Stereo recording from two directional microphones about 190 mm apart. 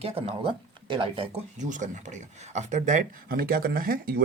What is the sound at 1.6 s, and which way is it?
Speech, 40° right (ahead or behind).